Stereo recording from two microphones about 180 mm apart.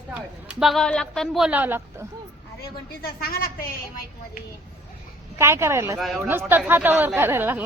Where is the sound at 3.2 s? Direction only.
55° left (ahead or behind).